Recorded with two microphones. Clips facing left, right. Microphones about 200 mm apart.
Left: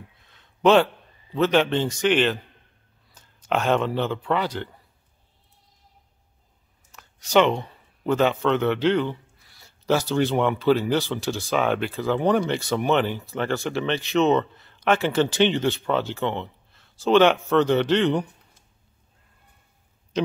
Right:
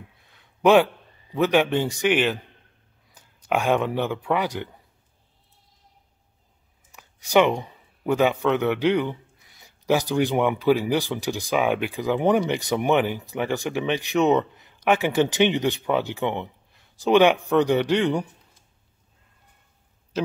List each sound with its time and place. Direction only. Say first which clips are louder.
0.2 s a sound: even; 10° right (ahead or behind)
1.3 s speech: even; 15° right (ahead or behind)
6.9 s speech: right 1 dB; 15° right (ahead or behind)